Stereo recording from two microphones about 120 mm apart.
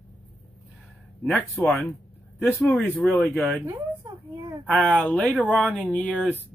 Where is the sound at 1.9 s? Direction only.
15° left (ahead or behind).